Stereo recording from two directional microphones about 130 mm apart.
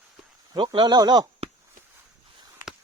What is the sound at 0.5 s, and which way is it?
Speech, 40° right (ahead or behind).